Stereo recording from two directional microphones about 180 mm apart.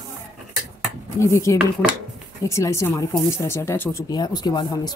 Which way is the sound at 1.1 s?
15° left (ahead or behind).